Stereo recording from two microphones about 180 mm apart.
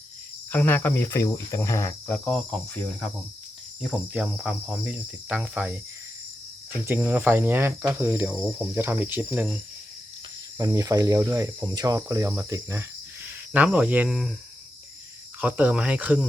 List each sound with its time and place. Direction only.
0.5 s cricket: 10° left (ahead or behind)
2.1 s speech: 5° left (ahead or behind)
3.8 s speech: 5° right (ahead or behind)
6.8 s speech: 10° right (ahead or behind)
8.4 s speech: centre (ahead or behind)
8.7 s speech: 10° right (ahead or behind)
10.6 s speech: 20° right (ahead or behind); by 14.3 s 5° right (ahead or behind)
15.4 s speech: 10° right (ahead or behind)